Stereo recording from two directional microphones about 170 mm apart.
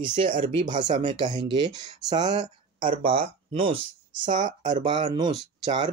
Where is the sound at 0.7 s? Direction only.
45° right (ahead or behind).